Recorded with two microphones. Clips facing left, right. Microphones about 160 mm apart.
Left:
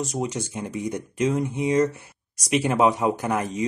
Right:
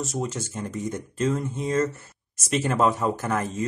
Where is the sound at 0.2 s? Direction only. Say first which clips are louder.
Left 2 dB; 15° left (ahead or behind).